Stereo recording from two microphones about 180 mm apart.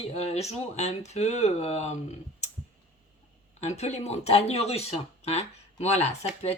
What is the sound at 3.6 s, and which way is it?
Speech, 35° left (ahead or behind).